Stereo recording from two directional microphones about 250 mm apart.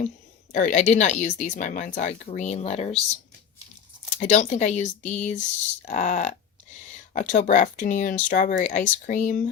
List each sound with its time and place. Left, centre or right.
0.5 s speech: left
4.2 s speech: left